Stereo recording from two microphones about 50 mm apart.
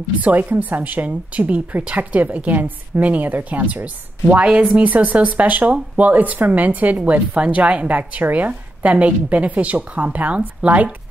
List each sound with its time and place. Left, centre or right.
0.2 s a woman's voice: right